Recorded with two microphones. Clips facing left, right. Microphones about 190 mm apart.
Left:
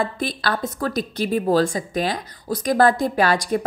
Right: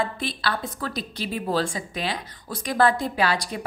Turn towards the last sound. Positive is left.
turn(degrees=45)  # may be behind; listen again after turning